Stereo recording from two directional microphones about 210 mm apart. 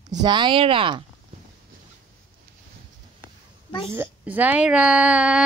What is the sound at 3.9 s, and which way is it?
Speech, 10° right (ahead or behind).